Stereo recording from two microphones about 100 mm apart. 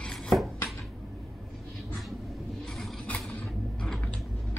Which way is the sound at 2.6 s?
Centre (ahead or behind).